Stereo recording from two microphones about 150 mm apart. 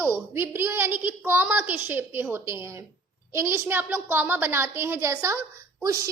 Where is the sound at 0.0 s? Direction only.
15° right (ahead or behind).